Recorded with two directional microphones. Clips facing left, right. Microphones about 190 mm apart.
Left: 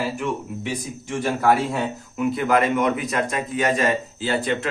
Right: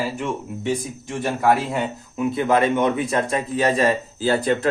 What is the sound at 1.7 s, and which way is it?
Speech, 25° right (ahead or behind).